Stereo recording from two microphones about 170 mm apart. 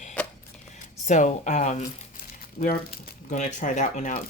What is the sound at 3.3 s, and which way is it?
Speech, 45° left (ahead or behind).